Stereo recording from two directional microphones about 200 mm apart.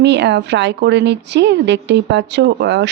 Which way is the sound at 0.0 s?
60° right (ahead or behind).